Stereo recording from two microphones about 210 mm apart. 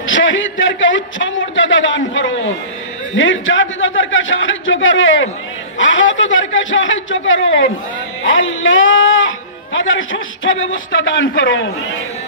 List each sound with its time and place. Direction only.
0.0 s a man's voice: 65° left (ahead or behind)